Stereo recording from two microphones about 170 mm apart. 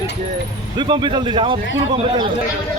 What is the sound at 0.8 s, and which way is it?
Speech, 25° right (ahead or behind).